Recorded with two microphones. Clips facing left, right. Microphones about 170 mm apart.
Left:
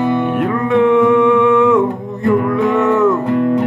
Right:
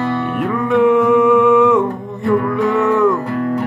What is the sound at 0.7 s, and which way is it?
Music, centre (ahead or behind).